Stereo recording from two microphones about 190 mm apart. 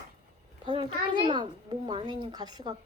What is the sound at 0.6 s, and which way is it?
Speech, 25° right (ahead or behind).